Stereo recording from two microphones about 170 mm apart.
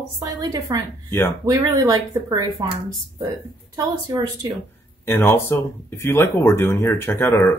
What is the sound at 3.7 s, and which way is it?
Speech, 20° right (ahead or behind).